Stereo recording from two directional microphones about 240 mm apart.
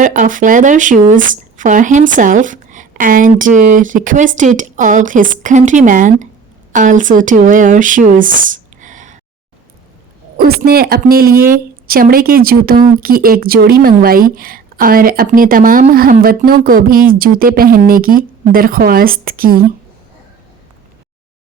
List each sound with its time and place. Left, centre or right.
0.0 s a woman's voice: right
10.3 s a woman's voice: right